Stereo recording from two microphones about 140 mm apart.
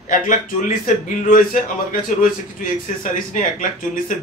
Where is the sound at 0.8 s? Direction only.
75° left (ahead or behind).